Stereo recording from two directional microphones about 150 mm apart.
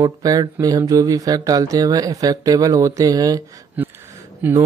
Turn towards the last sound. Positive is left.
turn(degrees=-10)  # may be behind; listen again after turning